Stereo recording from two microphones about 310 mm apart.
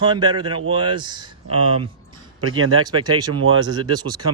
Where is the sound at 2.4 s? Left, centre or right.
Right.